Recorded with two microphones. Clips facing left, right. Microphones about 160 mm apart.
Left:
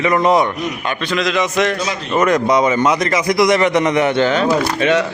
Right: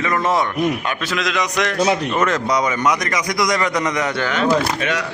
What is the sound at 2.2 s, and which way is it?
Speech, 15° left (ahead or behind).